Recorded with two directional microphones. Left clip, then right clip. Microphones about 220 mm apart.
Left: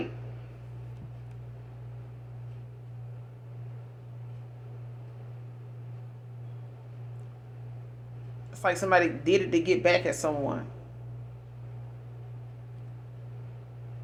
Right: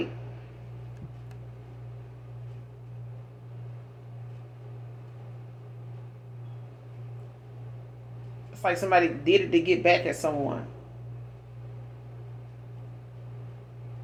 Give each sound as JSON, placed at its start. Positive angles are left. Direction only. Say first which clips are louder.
{"t": 8.6, "sound": "speech", "louder": "right 1 dB", "side_deg": 25}